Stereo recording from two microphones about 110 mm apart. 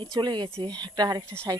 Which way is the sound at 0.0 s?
40° right (ahead or behind).